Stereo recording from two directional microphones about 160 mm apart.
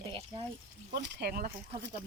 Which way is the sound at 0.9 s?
90° right.